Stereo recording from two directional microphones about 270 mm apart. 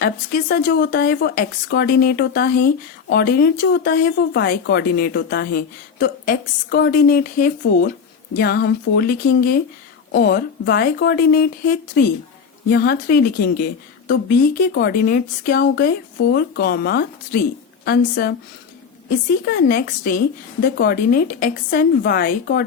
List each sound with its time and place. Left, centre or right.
0.0 s speech: left
19.5 s speech: left